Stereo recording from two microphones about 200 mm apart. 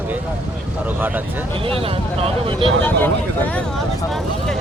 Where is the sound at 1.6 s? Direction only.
30° right (ahead or behind).